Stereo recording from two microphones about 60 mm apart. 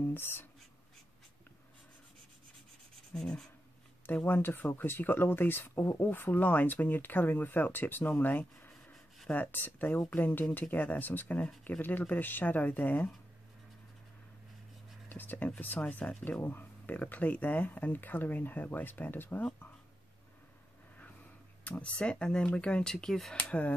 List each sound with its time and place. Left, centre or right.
0.0 s speech: left
3.2 s speech: centre
4.0 s speech: left
15.0 s speech: left
21.6 s speech: left; by 23.3 s centre
23.3 s speech: left